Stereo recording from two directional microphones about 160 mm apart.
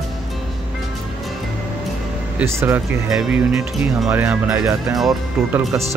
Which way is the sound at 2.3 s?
10° right (ahead or behind).